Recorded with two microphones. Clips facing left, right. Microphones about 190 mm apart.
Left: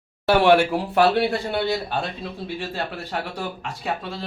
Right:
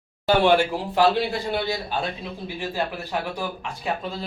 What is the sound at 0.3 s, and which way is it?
Speech, 70° left (ahead or behind).